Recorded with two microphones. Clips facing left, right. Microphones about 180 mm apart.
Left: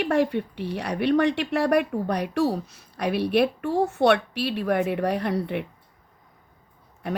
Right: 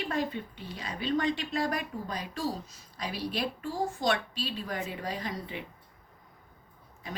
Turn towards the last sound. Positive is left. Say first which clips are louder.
# left 11 dB
turn(degrees=65)  # may be behind; listen again after turning